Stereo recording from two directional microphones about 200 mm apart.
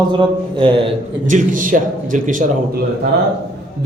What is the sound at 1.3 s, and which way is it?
A man's voice, 40° right (ahead or behind).